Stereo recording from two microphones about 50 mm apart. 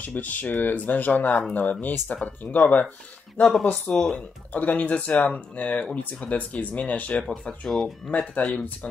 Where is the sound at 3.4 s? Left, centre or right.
Centre.